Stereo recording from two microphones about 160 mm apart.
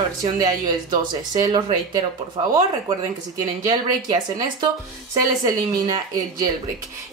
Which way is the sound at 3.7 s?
25° right (ahead or behind).